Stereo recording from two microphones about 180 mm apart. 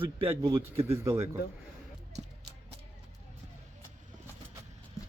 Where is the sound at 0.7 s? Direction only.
15° right (ahead or behind).